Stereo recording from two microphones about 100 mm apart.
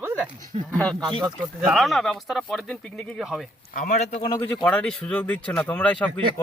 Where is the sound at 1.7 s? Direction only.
Centre (ahead or behind).